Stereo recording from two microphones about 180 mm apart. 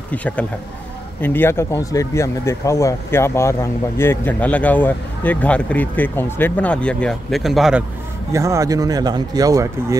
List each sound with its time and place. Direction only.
0.1 s speech: 10° left (ahead or behind)
8.3 s speech: 15° right (ahead or behind)